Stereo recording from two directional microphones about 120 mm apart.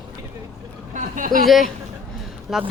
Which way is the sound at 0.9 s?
90° right.